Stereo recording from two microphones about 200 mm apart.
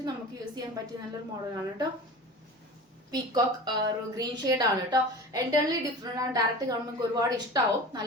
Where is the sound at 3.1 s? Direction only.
20° right (ahead or behind).